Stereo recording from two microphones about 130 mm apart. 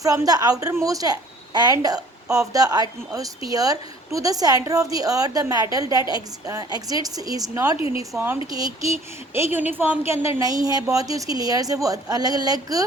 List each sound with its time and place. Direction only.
0.0 s a woman's voice: 30° right (ahead or behind)
7.8 s a woman's voice: 45° left (ahead or behind)
8.4 s a woman's voice: 30° right (ahead or behind)